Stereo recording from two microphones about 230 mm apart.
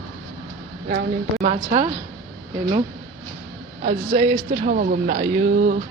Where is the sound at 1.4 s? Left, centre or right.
Right.